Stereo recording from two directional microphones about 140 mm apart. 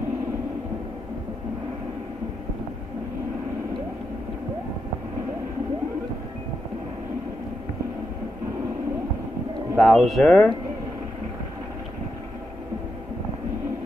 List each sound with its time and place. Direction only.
9.8 s speech: centre (ahead or behind)